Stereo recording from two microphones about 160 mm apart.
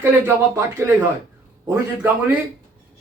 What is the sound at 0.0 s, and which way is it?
Speech, 15° right (ahead or behind).